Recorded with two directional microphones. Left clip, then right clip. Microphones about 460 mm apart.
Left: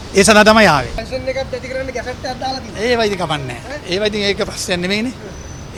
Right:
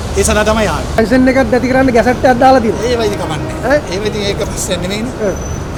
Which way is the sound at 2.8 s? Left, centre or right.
Left.